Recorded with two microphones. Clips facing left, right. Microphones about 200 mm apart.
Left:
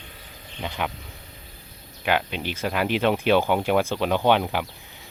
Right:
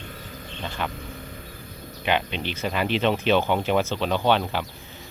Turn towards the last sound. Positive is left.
turn(degrees=15)  # may be behind; listen again after turning